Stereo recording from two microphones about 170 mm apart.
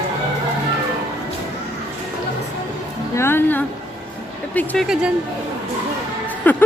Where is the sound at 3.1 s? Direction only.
15° left (ahead or behind).